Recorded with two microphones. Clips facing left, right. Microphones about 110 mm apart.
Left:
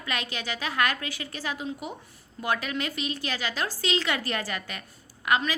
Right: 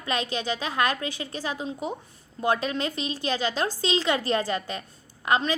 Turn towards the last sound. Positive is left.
turn(degrees=-30)  # may be behind; listen again after turning